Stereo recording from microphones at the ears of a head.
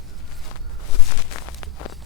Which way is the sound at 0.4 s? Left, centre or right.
Left.